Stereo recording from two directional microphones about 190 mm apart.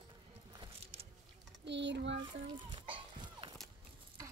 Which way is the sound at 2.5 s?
25° right (ahead or behind).